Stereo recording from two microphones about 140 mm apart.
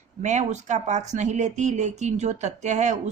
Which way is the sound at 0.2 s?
55° right (ahead or behind).